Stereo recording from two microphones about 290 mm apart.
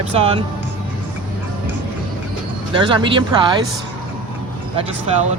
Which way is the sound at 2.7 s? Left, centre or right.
Centre.